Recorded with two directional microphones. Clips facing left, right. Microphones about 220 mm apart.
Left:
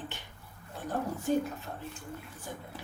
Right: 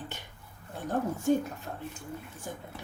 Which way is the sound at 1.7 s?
45° right (ahead or behind).